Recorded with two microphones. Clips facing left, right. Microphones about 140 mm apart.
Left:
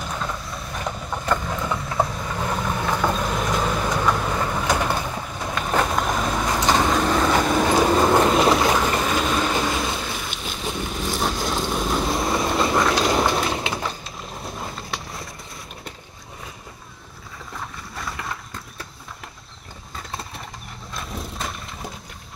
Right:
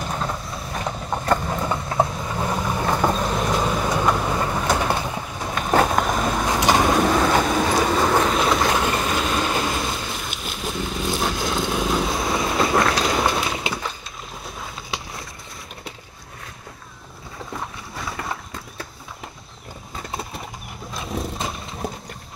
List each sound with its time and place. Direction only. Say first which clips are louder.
1.4 s boat: right 2 dB; 25° right (ahead or behind)
3.1 s train: right 1 dB; centre (ahead or behind)
5.9 s vehicle: right 2 dB; centre (ahead or behind)
6.4 s vehicle: right 2 dB; 15° right (ahead or behind)
7.2 s vehicle: even; centre (ahead or behind)
13.5 s breaking: left 1 dB; 25° left (ahead or behind)
14.4 s a sound: left 4 dB; centre (ahead or behind)
17.9 s boat: right 1 dB; centre (ahead or behind)
20.1 s bird: right 3 dB; centre (ahead or behind)
20.9 s a sound: right 5 dB; centre (ahead or behind)